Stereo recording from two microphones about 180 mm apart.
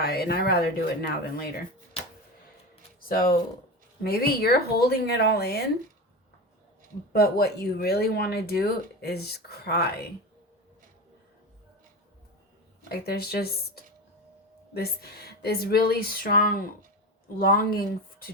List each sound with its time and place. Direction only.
0.0 s speech: 60° left (ahead or behind)
3.1 s speech: 55° left (ahead or behind)
7.1 s speech: 60° left (ahead or behind)
12.9 s speech: 60° left (ahead or behind)